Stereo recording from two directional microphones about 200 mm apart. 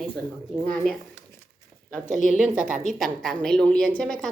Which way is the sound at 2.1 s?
40° right (ahead or behind).